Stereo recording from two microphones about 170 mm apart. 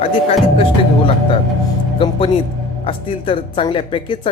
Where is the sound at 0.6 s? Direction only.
35° left (ahead or behind).